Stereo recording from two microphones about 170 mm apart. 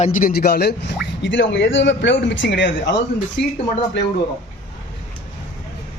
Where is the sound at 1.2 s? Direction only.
90° left.